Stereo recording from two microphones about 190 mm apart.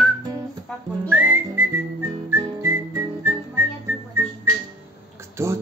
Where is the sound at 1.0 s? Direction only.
10° right (ahead or behind).